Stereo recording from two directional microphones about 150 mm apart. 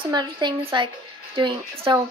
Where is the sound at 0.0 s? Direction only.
30° right (ahead or behind).